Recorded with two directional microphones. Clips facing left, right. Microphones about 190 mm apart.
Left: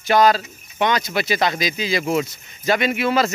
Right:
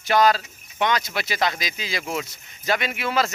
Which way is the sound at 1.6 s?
Centre (ahead or behind).